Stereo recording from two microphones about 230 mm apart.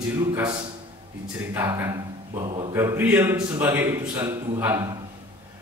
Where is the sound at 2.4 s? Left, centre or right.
Right.